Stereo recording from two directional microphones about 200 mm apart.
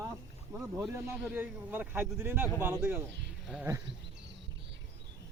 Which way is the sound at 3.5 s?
10° right (ahead or behind).